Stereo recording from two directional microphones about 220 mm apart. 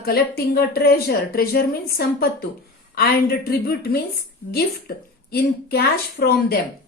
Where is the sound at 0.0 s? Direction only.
45° left (ahead or behind).